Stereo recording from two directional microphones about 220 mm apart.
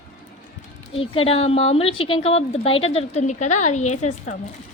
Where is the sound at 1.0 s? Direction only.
25° left (ahead or behind).